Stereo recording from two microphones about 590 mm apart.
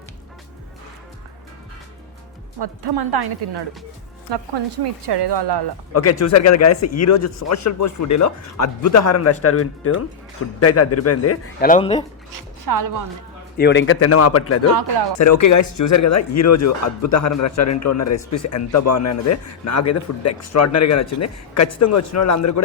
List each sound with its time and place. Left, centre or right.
2.6 s a woman's voice: right
5.9 s a man's voice: left
12.3 s speech: right
13.6 s a man's voice: centre
14.7 s a woman's voice: right
15.2 s a man's voice: left